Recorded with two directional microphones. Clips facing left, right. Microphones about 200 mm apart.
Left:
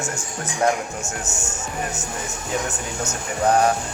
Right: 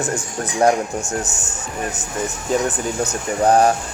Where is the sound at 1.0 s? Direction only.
15° right (ahead or behind).